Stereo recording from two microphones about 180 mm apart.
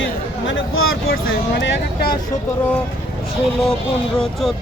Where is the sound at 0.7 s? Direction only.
90° left.